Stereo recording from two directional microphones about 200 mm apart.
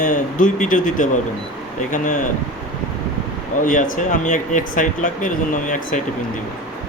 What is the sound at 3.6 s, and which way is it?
Speech, 40° left (ahead or behind).